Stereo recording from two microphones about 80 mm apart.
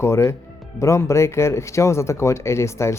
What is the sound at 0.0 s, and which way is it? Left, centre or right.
Speech, left.